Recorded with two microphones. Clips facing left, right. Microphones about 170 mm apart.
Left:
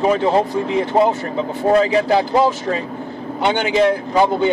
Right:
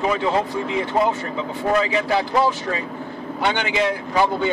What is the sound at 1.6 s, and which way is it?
Speech, 35° left (ahead or behind).